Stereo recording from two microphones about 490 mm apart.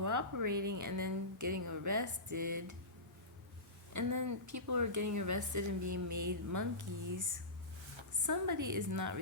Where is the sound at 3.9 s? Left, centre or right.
Right.